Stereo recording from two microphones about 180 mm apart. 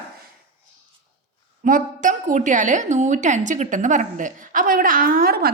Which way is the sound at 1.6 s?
45° right (ahead or behind).